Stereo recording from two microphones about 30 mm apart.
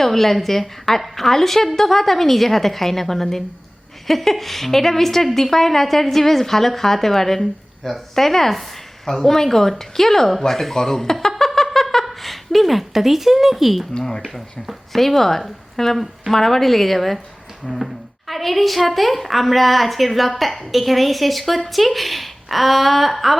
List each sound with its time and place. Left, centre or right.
0.0 s a woman's voice: centre
10.4 s a sound: centre
12.0 s a woman's voice: centre
18.3 s a woman's voice: centre